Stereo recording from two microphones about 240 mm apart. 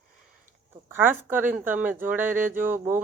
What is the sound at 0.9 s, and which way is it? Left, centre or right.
Speech, centre.